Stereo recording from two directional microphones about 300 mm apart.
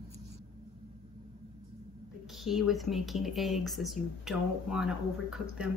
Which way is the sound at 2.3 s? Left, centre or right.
Centre.